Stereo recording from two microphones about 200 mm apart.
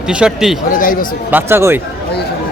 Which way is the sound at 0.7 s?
45° left (ahead or behind).